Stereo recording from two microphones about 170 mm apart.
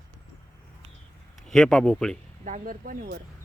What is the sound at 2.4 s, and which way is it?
Speech, 50° right (ahead or behind).